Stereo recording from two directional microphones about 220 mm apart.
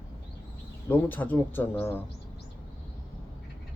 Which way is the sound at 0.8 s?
10° left (ahead or behind).